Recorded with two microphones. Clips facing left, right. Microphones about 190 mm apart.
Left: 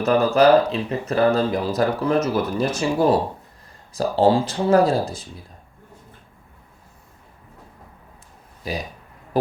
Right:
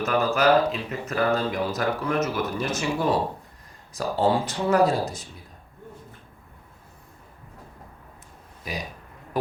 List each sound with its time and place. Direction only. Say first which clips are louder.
0.0 s speech: left 6 dB; 35° left (ahead or behind)
8.7 s speech: left 5 dB; 30° left (ahead or behind)